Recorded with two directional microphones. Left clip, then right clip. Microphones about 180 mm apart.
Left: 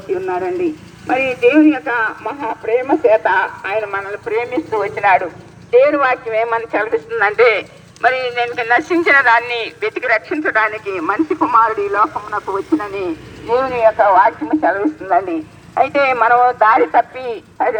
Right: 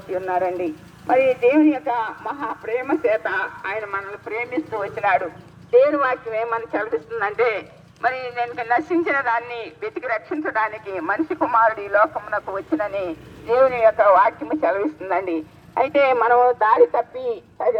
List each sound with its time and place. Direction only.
0.3 s a man's voice: 25° right (ahead or behind); by 16.5 s 50° right (ahead or behind)
16.5 s music: 45° right (ahead or behind)